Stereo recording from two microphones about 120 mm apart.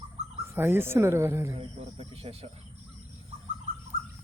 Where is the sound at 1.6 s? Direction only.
50° right (ahead or behind).